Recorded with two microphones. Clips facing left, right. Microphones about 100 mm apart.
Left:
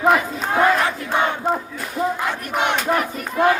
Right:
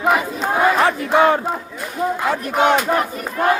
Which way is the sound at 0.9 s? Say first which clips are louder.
Right 7 dB; 90° right.